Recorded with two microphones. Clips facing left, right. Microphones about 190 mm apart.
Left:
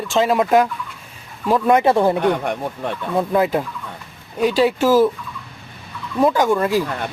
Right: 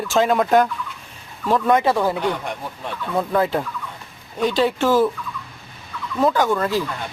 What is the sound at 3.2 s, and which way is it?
Speech, 15° left (ahead or behind).